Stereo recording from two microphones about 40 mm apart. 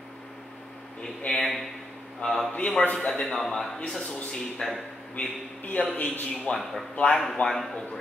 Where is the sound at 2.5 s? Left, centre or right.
Left.